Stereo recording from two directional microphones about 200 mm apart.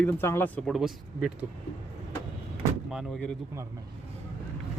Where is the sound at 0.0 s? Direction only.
10° left (ahead or behind).